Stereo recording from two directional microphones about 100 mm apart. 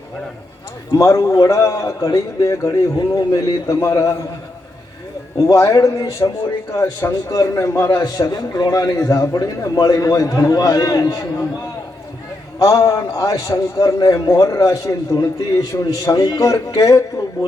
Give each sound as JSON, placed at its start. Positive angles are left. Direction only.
{"t": 0.9, "sound": "a man's voice", "side_deg": 30}
{"t": 5.4, "sound": "a man's voice", "side_deg": 30}
{"t": 12.5, "sound": "a man's voice", "side_deg": 35}